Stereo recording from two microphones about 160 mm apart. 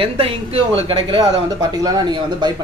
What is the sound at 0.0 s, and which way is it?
Speech, 35° right (ahead or behind).